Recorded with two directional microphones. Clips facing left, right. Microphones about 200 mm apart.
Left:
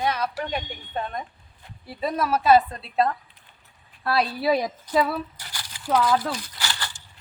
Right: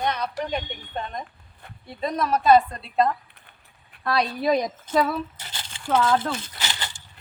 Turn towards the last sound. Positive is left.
turn(degrees=-20)  # may be behind; listen again after turning